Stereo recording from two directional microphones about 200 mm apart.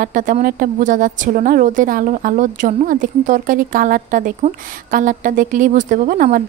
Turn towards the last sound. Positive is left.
turn(degrees=-40)  # may be behind; listen again after turning